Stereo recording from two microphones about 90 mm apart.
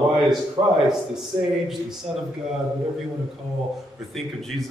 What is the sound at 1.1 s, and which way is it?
Speech, 5° right (ahead or behind).